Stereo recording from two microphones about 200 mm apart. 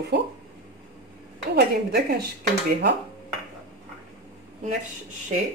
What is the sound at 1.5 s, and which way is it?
Speech, 50° right (ahead or behind).